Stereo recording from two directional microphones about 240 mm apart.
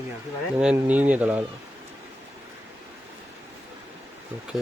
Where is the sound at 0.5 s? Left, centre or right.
Centre.